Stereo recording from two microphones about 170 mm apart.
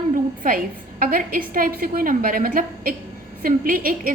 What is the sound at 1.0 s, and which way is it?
A woman's voice, 55° right (ahead or behind).